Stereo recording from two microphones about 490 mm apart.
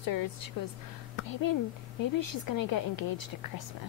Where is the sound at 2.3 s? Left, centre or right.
Left.